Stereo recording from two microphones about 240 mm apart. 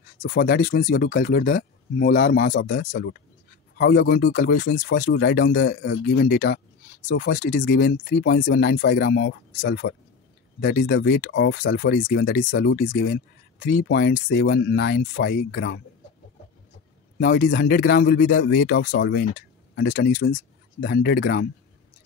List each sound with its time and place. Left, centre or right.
0.2 s speech: left
17.2 s speech: left